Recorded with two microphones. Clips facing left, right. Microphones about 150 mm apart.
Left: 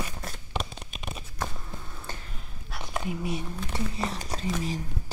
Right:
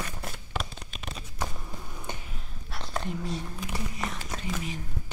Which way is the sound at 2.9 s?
5° left (ahead or behind).